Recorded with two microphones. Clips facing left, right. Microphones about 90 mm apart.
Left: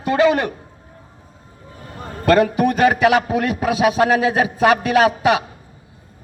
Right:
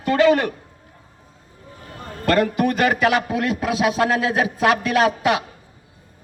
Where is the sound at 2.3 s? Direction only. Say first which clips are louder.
Left 4 dB; 20° left (ahead or behind).